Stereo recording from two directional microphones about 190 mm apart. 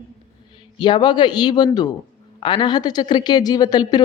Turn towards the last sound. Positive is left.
turn(degrees=20)  # may be behind; listen again after turning